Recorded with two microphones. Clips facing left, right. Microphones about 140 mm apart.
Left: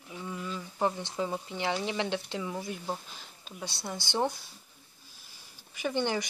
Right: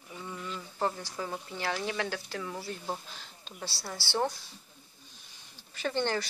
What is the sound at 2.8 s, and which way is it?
Speech, centre (ahead or behind).